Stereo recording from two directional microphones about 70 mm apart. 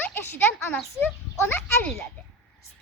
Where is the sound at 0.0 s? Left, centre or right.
Left.